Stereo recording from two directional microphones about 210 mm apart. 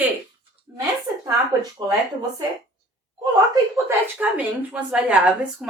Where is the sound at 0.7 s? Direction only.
15° right (ahead or behind).